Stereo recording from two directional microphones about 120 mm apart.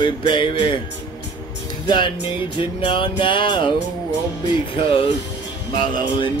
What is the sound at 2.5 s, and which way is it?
Music, 45° left (ahead or behind).